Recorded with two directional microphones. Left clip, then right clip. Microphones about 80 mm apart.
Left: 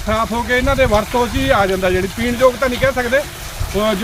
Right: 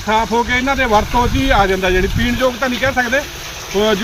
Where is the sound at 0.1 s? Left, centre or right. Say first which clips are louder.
Right 2 dB; left.